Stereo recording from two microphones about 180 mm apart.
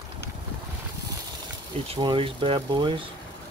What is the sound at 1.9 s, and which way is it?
Speech, 25° right (ahead or behind).